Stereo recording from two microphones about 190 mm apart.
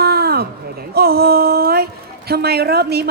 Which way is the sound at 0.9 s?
55° right (ahead or behind).